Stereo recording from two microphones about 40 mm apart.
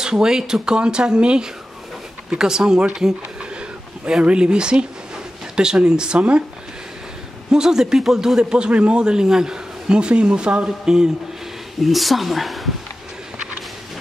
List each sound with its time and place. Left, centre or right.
0.0 s speech: centre
4.2 s speech: right
7.5 s speech: centre
11.8 s speech: centre